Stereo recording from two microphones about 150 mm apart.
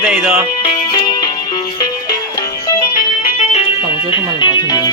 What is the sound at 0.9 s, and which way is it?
Music, 30° left (ahead or behind).